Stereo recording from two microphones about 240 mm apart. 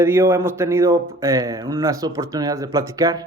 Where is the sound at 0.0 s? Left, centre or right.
Centre.